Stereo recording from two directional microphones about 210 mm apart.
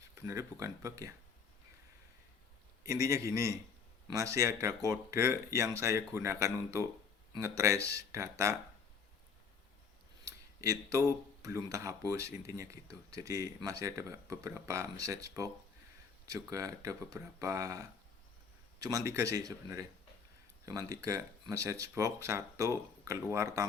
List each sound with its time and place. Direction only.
0.2 s speech: 15° right (ahead or behind)
2.8 s speech: 15° right (ahead or behind)
10.2 s speech: 15° right (ahead or behind)